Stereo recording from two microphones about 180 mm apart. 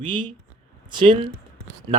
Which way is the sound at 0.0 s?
30° right (ahead or behind).